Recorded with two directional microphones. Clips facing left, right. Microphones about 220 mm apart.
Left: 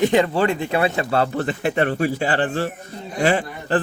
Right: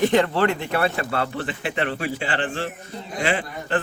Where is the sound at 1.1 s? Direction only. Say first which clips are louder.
Left 5 dB; 40° left (ahead or behind).